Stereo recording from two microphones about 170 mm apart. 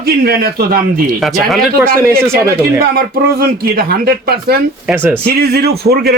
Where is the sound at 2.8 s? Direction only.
60° right (ahead or behind).